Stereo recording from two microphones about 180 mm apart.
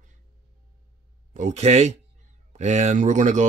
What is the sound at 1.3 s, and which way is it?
Speech, 40° right (ahead or behind).